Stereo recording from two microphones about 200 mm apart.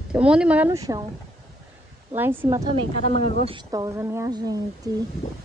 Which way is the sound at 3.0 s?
35° left (ahead or behind).